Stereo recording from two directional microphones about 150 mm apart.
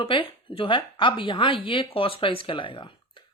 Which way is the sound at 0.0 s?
35° left (ahead or behind).